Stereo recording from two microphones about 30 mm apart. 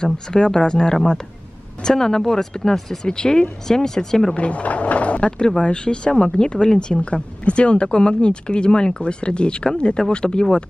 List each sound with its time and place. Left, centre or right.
0.0 s speech: left
3.1 s speech: left
4.4 s speech: left
5.6 s speech: left